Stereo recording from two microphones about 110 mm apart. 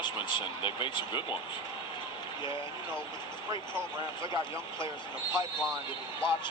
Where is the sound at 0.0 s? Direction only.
45° left (ahead or behind).